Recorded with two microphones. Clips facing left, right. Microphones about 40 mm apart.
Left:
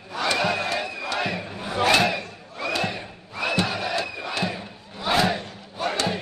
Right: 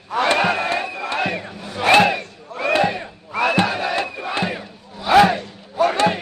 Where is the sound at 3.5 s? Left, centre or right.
Right.